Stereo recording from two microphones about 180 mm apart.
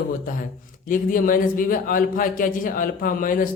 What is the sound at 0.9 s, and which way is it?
A man's voice, 50° left (ahead or behind).